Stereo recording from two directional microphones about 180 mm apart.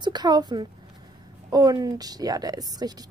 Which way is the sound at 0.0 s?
25° right (ahead or behind).